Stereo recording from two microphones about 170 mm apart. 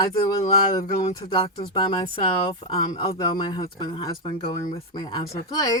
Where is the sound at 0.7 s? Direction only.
25° left (ahead or behind).